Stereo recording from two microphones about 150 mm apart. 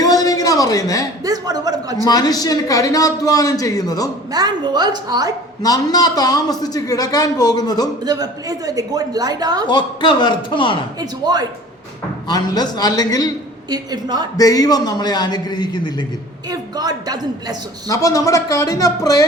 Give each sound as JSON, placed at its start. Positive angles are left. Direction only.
{"t": 0.0, "sound": "a sound", "side_deg": 25}
{"t": 1.2, "sound": "a man's voice", "side_deg": -25}
{"t": 2.0, "sound": "a man's voice", "side_deg": 25}
{"t": 4.3, "sound": "a woman's voice", "side_deg": -25}
{"t": 5.6, "sound": "a man's voice", "side_deg": 25}
{"t": 8.0, "sound": "a woman's voice", "side_deg": -25}
{"t": 9.6, "sound": "a man's voice", "side_deg": 30}
{"t": 11.0, "sound": "a woman's voice", "side_deg": -25}
{"t": 12.3, "sound": "a man's voice", "side_deg": 25}
{"t": 13.7, "sound": "a woman's voice", "side_deg": -25}
{"t": 14.3, "sound": "a man's voice", "side_deg": 25}
{"t": 16.5, "sound": "a woman's voice", "side_deg": -25}
{"t": 17.8, "sound": "a man's voice", "side_deg": 20}